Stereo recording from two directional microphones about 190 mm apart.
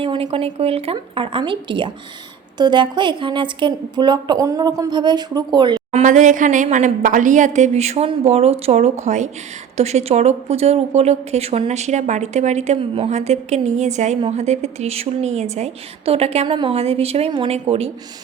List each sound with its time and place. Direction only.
0.0 s a woman's voice: 25° right (ahead or behind)
5.9 s a woman's voice: 40° right (ahead or behind)